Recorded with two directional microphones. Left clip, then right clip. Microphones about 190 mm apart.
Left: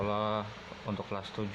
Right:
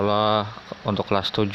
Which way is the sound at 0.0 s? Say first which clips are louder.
Right 12 dB; 35° right (ahead or behind).